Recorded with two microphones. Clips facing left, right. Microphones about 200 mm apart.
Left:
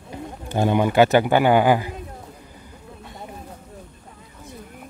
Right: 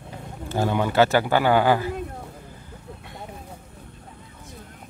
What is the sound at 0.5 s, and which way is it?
Speech, 15° left (ahead or behind).